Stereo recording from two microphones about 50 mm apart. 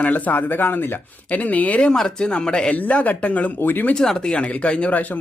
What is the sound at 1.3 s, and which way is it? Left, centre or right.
Speech, left.